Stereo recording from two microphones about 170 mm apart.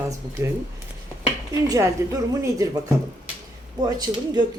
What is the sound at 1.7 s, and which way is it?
A woman's voice, 20° right (ahead or behind).